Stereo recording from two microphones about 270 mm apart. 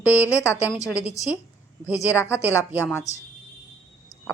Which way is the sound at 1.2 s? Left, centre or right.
Centre.